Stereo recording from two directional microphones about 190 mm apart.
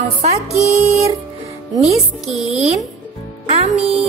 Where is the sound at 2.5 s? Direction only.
35° right (ahead or behind).